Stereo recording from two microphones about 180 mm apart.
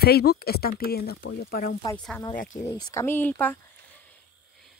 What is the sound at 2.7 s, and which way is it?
Speech, 20° left (ahead or behind).